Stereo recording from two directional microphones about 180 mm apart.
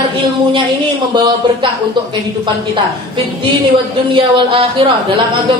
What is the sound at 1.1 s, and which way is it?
Speech, 25° right (ahead or behind).